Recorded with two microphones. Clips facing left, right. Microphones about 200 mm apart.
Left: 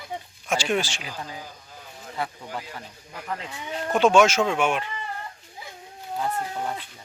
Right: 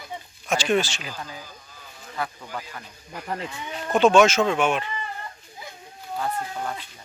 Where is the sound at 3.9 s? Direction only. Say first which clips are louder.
Right 1 dB; 10° left (ahead or behind).